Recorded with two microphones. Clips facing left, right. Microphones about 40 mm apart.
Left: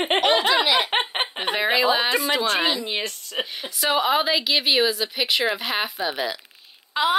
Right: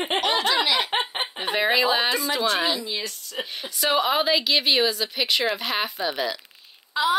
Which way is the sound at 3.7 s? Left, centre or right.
Centre.